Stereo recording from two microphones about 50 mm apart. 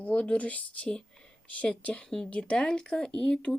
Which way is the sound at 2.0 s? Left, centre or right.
Centre.